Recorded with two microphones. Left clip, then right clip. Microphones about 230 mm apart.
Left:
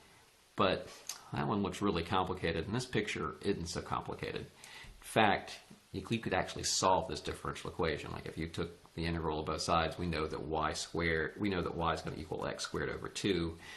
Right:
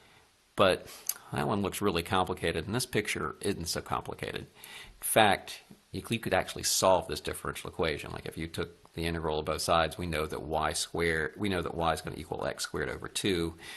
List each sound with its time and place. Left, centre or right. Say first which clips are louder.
0.5 s speech: right 6 dB; right